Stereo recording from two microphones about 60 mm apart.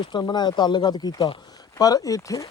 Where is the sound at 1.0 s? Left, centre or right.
Left.